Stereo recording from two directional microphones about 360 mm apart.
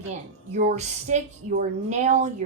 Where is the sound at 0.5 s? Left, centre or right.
Centre.